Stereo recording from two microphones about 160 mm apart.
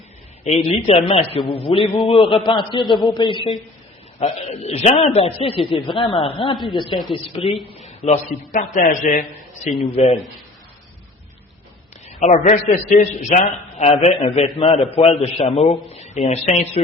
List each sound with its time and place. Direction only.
0.4 s a man's voice: 40° left (ahead or behind)
4.2 s a man's voice: 40° left (ahead or behind)
9.9 s a man's voice: 40° left (ahead or behind)
12.0 s a man's voice: 45° left (ahead or behind)
14.4 s a man's voice: 25° left (ahead or behind)